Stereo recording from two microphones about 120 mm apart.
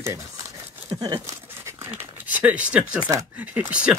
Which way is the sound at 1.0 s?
35° right (ahead or behind).